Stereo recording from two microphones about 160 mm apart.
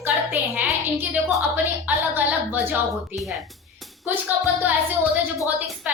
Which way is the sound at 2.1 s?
10° right (ahead or behind).